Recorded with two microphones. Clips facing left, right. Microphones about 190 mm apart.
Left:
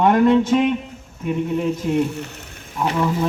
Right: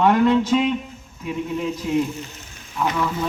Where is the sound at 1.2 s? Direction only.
65° left (ahead or behind).